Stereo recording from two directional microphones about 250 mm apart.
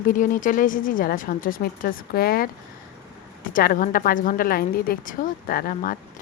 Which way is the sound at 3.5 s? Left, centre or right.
Left.